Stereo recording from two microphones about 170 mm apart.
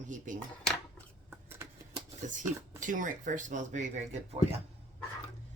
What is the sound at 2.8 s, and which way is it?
Speech, 50° right (ahead or behind).